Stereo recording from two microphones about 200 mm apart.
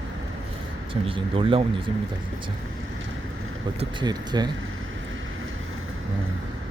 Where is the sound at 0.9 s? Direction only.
25° right (ahead or behind).